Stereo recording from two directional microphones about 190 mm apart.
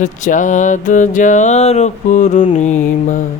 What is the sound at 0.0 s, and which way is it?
Mantra, 40° left (ahead or behind).